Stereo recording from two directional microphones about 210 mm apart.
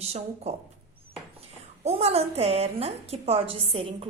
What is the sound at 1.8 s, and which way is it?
A woman's voice, 30° right (ahead or behind).